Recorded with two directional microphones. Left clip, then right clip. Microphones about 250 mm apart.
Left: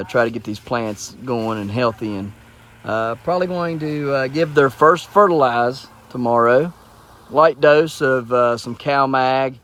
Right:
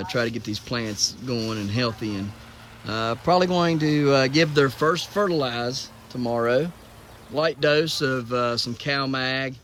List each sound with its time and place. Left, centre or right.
0.0 s speech: centre